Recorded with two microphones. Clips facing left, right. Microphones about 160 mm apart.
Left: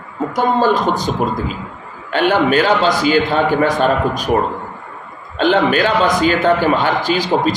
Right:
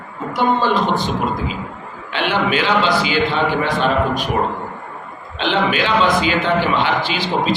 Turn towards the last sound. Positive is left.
turn(degrees=40)  # may be behind; listen again after turning